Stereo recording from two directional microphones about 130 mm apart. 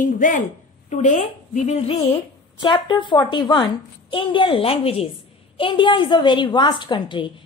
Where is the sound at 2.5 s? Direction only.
35° left (ahead or behind).